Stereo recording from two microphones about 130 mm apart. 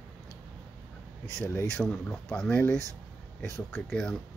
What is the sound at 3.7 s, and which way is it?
Speech, 5° left (ahead or behind).